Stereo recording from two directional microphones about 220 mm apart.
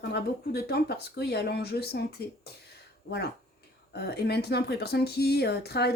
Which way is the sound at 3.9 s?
50° left (ahead or behind).